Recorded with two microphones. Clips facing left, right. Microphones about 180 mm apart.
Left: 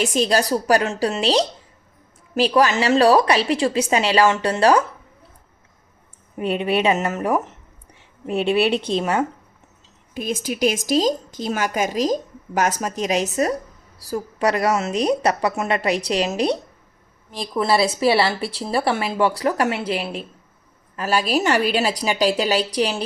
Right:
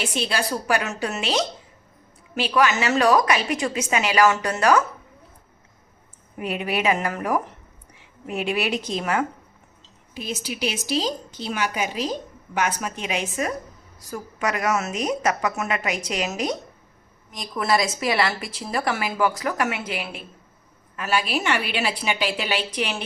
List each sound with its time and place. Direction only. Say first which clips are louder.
0.0 s a woman's voice: left 7 dB; 40° left (ahead or behind)
6.3 s a woman's voice: left 5 dB; 30° left (ahead or behind)
10.2 s a woman's voice: left 6 dB; 50° left (ahead or behind)